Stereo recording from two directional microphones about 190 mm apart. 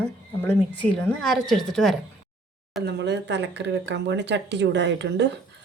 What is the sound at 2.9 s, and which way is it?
Speech, 65° right (ahead or behind).